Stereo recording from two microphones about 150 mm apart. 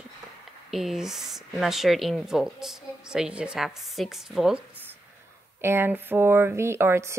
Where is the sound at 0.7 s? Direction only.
Centre (ahead or behind).